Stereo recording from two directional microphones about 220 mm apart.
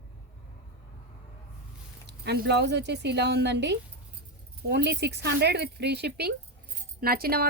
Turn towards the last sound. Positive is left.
turn(degrees=-45)  # may be behind; listen again after turning